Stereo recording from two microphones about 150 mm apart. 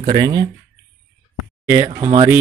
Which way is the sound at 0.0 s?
30° right (ahead or behind).